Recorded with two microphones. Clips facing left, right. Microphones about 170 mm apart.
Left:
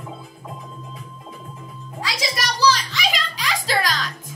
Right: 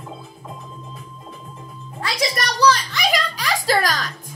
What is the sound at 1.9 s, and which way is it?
Music, 55° right (ahead or behind).